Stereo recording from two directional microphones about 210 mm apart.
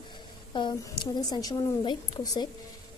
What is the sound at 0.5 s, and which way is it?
A woman's voice, 20° left (ahead or behind).